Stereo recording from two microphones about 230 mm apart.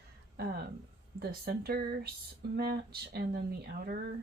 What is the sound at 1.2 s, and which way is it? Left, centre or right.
Speech, right.